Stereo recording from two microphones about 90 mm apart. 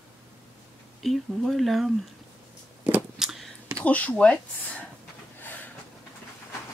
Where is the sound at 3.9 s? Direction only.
15° left (ahead or behind).